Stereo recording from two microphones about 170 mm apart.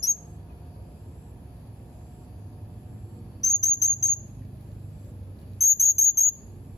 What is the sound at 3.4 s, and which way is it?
Cricket, 20° left (ahead or behind).